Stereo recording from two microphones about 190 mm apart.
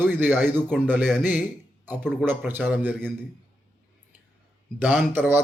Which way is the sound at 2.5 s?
10° right (ahead or behind).